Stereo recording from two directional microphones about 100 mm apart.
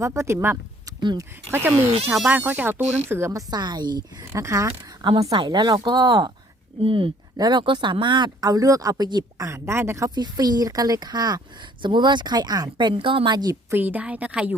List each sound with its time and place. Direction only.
0.0 s speech: 30° right (ahead or behind)
1.5 s speech: 25° right (ahead or behind)
3.5 s a woman's voice: 45° right (ahead or behind)
4.3 s speech: 30° right (ahead or behind)
5.3 s a woman's voice: 45° right (ahead or behind)
6.8 s speech: 60° right (ahead or behind)
7.3 s speech: 40° right (ahead or behind)
7.6 s a woman's voice: 55° right (ahead or behind)
9.5 s speech: 25° right (ahead or behind)
10.2 s a woman's voice: 40° right (ahead or behind)
13.7 s a woman's voice: 20° right (ahead or behind)